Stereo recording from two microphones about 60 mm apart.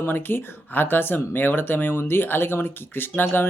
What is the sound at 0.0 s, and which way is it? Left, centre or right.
Speech, left.